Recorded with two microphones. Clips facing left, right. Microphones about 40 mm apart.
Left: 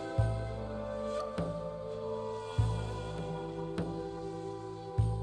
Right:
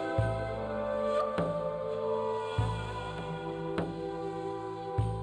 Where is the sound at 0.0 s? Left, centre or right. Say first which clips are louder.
Right 5 dB; right.